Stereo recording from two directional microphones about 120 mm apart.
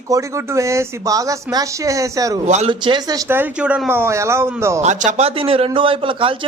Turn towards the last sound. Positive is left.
turn(degrees=-45)  # may be behind; listen again after turning